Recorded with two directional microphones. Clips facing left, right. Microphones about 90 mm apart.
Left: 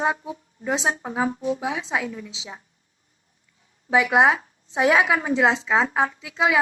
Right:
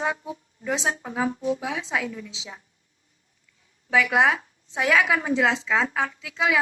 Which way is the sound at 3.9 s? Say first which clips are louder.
Left 3 dB; 25° left (ahead or behind).